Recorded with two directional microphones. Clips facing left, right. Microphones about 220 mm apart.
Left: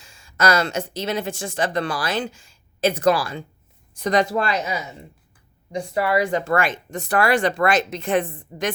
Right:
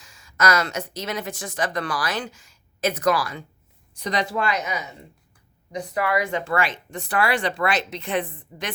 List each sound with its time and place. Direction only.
0.0 s speech: 30° left (ahead or behind)
3.9 s speech: 50° left (ahead or behind)